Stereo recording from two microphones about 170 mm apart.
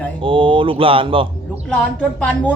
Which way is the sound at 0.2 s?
30° right (ahead or behind).